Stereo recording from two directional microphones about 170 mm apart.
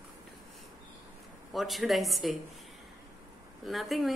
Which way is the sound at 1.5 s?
Centre (ahead or behind).